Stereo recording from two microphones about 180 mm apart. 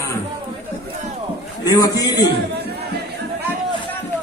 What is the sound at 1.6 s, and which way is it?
Speech, 20° left (ahead or behind).